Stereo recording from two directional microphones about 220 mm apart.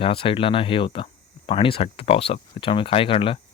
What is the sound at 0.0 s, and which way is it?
Speech, 25° left (ahead or behind).